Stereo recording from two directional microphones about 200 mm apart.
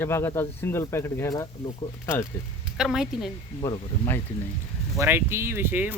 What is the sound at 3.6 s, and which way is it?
Speech, 20° left (ahead or behind).